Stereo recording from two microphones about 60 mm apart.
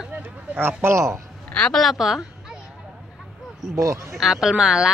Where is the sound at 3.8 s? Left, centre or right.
Right.